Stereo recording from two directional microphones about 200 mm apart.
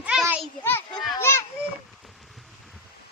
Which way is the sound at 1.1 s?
15° left (ahead or behind).